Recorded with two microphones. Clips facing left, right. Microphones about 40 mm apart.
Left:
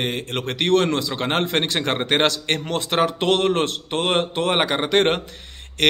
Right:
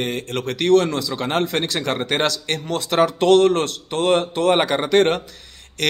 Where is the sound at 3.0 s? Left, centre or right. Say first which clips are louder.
Right 6 dB; centre.